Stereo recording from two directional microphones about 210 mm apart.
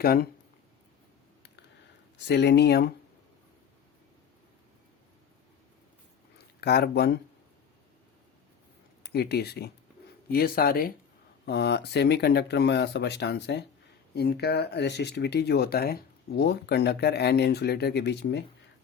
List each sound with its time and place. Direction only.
0.0 s speech: 45° left (ahead or behind)
2.2 s speech: 55° left (ahead or behind)
6.6 s speech: 50° left (ahead or behind)
9.0 s speech: 50° left (ahead or behind)